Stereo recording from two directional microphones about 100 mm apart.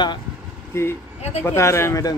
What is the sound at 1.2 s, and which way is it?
Speech, 90° left.